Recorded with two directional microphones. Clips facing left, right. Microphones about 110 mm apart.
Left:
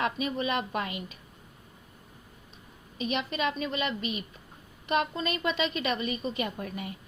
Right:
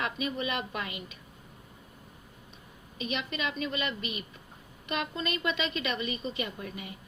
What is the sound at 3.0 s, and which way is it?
A woman's voice, 40° left (ahead or behind).